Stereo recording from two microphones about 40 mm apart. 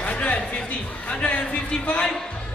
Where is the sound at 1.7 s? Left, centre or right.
Left.